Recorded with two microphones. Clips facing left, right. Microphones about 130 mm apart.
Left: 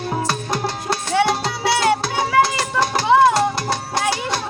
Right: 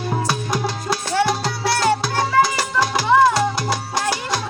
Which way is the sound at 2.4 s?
25° left (ahead or behind).